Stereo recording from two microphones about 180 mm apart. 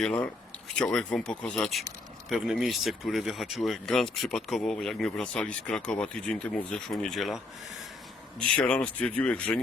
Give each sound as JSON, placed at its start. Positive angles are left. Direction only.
{"t": 0.0, "sound": "speech", "side_deg": 5}
{"t": 8.5, "sound": "speech", "side_deg": 5}